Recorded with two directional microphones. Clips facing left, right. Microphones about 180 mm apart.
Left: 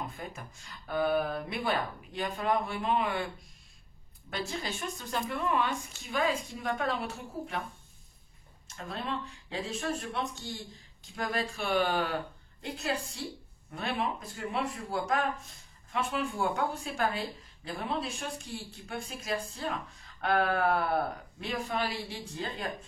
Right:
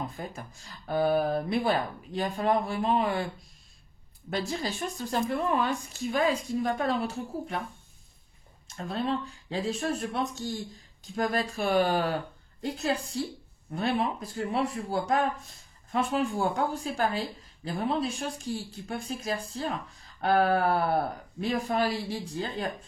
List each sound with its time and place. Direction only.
0.0 s speech: 35° right (ahead or behind)
4.3 s speech: 35° right (ahead or behind)
8.6 s speech: 35° right (ahead or behind)